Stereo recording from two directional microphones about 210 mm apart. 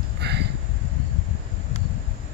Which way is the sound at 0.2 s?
50° right (ahead or behind).